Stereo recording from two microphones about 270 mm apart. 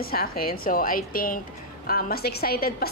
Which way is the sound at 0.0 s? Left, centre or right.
Left.